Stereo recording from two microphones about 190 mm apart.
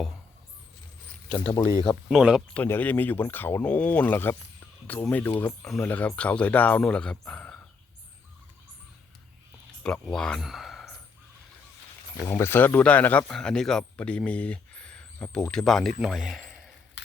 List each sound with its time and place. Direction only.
1.3 s speech: 20° left (ahead or behind)
2.0 s speech: 5° right (ahead or behind)
2.5 s speech: 10° left (ahead or behind)
9.8 s speech: 5° left (ahead or behind)
12.1 s a man's voice: 15° left (ahead or behind)